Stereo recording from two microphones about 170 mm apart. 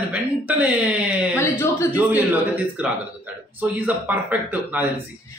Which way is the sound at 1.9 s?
10° right (ahead or behind).